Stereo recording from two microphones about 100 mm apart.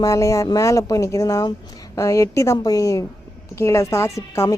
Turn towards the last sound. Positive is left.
turn(degrees=30)  # may be behind; listen again after turning